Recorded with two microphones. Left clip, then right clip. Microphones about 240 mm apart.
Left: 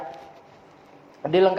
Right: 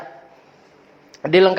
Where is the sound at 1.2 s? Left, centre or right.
Right.